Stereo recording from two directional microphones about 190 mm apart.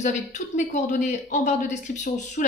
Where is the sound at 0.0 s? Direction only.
40° left (ahead or behind).